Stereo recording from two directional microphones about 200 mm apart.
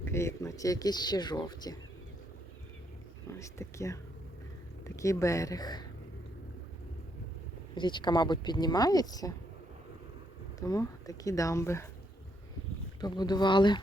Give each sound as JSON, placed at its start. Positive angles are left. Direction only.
{"t": 0.0, "sound": "speech", "side_deg": 15}
{"t": 3.2, "sound": "speech", "side_deg": 15}
{"t": 7.8, "sound": "speech", "side_deg": 20}
{"t": 10.7, "sound": "speech", "side_deg": 15}
{"t": 13.0, "sound": "speech", "side_deg": 20}